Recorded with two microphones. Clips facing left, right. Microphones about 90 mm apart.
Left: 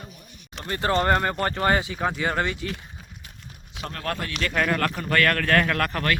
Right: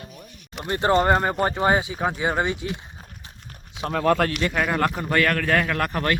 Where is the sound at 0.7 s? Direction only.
25° right (ahead or behind).